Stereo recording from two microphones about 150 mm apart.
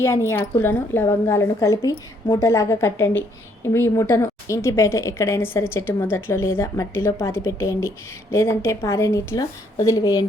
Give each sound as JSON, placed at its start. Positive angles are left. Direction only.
{"t": 0.0, "sound": "a woman's voice", "side_deg": 15}